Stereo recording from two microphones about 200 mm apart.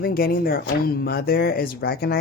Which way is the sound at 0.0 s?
50° left (ahead or behind).